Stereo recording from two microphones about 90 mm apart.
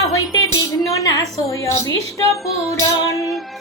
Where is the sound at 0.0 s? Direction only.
40° left (ahead or behind).